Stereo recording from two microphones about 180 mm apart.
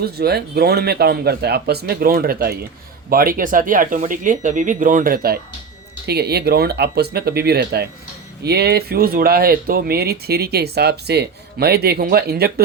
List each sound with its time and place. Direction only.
0.0 s speech: 60° right (ahead or behind)